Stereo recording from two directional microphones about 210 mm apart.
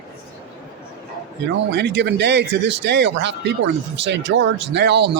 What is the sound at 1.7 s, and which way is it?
Speech, 55° right (ahead or behind).